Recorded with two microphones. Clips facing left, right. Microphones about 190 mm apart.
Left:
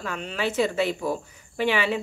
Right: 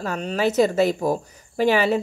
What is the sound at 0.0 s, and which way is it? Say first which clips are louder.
A woman's voice: right 6 dB; 40° right (ahead or behind).